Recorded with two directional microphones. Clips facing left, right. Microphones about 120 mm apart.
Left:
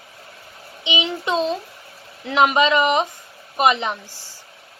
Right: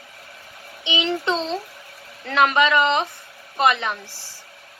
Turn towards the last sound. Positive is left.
turn(degrees=20)  # may be behind; listen again after turning